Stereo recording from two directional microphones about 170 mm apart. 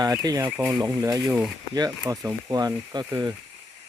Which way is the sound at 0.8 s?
20° right (ahead or behind).